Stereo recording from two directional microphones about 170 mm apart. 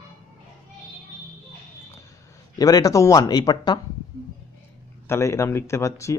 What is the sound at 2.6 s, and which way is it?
Speech, 20° left (ahead or behind).